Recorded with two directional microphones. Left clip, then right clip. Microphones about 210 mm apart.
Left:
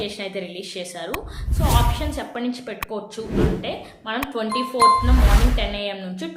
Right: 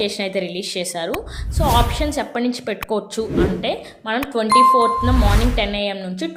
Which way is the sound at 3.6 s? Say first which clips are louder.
Right 6 dB; 30° right (ahead or behind).